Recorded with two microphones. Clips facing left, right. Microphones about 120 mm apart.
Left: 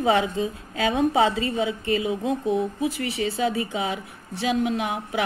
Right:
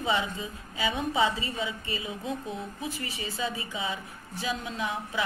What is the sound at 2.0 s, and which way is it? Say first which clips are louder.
Speech: left 10 dB; 15° left (ahead or behind).